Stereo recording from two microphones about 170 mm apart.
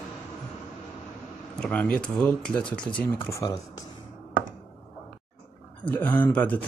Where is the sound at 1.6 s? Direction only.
10° left (ahead or behind).